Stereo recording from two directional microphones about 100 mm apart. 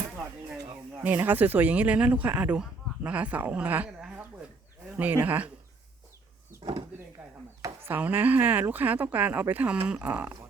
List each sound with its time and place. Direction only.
1.0 s speech: 20° right (ahead or behind)
4.0 s a sound: 15° right (ahead or behind)
4.9 s speech: 15° right (ahead or behind)
6.6 s speech: 55° right (ahead or behind)
7.6 s speech: 25° right (ahead or behind)